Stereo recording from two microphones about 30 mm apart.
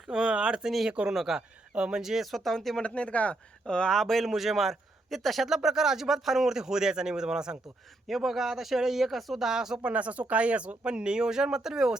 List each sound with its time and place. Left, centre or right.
0.3 s a sound: right
0.9 s speech: right
1.1 s speech: centre
1.4 s speech: right
2.2 s a man's voice: centre
2.8 s speech: left
3.7 s speech: left
3.9 s a man's voice: centre
5.5 s speech: centre
8.0 s speech: centre
9.4 s speech: centre
9.8 s speech: right
10.8 s speech: right
11.3 s speech: right